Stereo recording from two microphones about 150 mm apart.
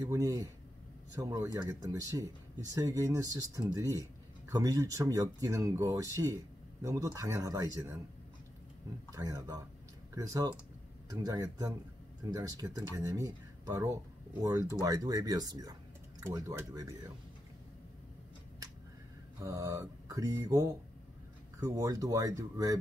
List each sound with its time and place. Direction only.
0.0 s speech: 25° right (ahead or behind)
9.1 s speech: 25° right (ahead or behind)
19.4 s speech: 25° right (ahead or behind)